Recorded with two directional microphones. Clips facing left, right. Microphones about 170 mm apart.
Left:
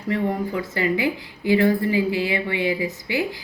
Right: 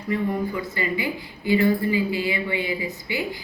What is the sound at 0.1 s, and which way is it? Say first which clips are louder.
Speech: left 1 dB; 85° left.